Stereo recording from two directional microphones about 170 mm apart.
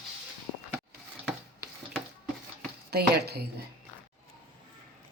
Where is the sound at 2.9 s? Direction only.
70° right (ahead or behind).